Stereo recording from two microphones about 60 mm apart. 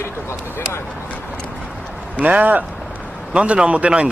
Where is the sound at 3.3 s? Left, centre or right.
Centre.